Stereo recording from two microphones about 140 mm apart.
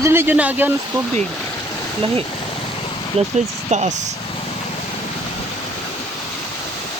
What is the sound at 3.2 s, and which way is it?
Speech, 55° right (ahead or behind).